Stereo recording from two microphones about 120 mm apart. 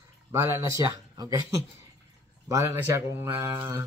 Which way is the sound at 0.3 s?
30° right (ahead or behind).